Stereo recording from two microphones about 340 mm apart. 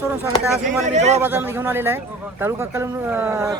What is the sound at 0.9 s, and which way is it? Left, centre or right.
Speech, centre.